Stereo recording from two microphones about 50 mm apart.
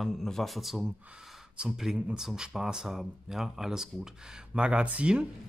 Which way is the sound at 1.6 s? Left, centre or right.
Right.